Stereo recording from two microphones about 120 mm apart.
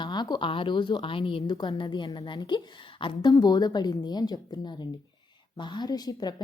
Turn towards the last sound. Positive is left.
turn(degrees=35)  # may be behind; listen again after turning